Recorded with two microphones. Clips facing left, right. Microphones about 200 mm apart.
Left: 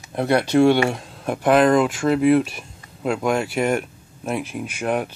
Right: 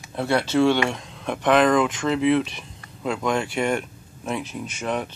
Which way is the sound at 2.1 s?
45° left (ahead or behind).